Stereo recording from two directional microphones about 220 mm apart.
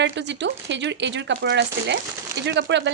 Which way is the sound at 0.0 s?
55° right (ahead or behind).